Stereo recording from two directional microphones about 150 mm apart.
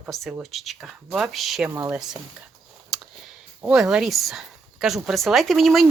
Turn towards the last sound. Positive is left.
turn(degrees=0)  # may be behind; listen again after turning